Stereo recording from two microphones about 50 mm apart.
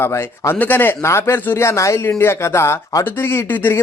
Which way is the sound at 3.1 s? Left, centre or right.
Left.